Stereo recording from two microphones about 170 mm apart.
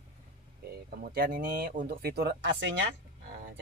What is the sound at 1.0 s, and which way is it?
Speech, 55° right (ahead or behind).